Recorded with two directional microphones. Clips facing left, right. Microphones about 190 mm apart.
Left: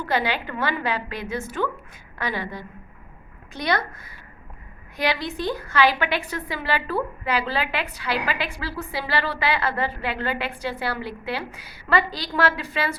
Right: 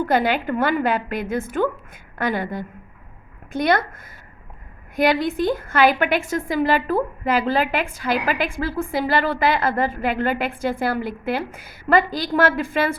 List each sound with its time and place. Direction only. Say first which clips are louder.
0.0 s a woman's voice: right 5 dB; 50° right (ahead or behind)